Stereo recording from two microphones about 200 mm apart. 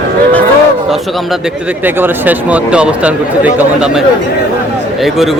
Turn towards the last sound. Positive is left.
turn(degrees=-5)  # may be behind; listen again after turning